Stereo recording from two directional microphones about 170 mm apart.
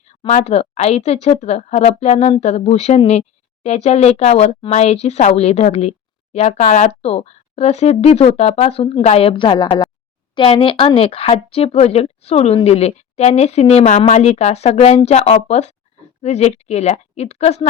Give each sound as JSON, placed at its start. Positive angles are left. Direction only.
{"t": 0.1, "sound": "a woman's voice", "side_deg": 45}